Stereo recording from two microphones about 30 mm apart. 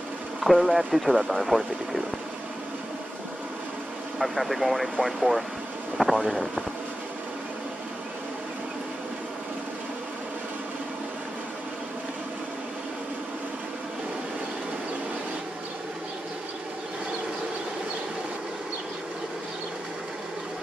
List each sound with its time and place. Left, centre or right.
0.4 s speech: centre
4.2 s speech: centre